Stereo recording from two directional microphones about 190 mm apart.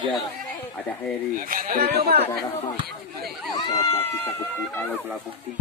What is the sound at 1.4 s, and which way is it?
Speech, 45° right (ahead or behind).